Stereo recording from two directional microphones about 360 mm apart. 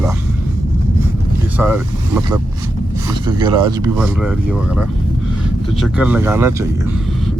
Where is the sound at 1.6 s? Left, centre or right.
Centre.